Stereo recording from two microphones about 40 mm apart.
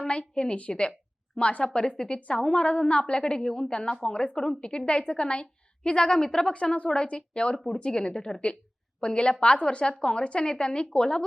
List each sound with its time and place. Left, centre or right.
0.0 s a woman's voice: left
6.5 s a woman's voice: left